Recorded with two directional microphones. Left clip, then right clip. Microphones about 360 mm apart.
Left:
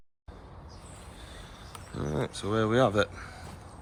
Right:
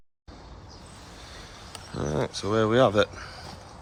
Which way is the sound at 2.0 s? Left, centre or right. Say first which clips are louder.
Right 4 dB; centre.